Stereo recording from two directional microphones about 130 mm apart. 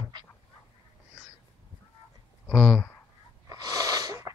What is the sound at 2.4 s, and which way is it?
Speech, 5° right (ahead or behind).